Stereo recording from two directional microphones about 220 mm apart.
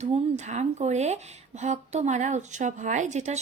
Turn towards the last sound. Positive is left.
turn(degrees=-30)  # may be behind; listen again after turning